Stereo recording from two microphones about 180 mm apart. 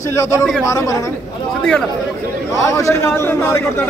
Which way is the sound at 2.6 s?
15° left (ahead or behind).